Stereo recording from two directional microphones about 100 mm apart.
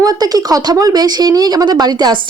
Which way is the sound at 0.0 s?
40° right (ahead or behind).